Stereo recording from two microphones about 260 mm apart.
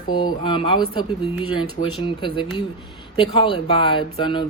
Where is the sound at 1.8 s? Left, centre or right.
Centre.